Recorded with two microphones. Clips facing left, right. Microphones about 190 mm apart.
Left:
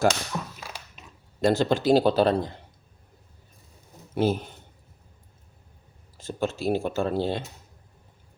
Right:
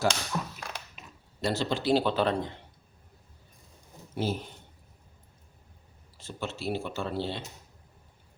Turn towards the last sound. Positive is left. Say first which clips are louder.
# left 7 dB
turn(degrees=45)  # may be behind; listen again after turning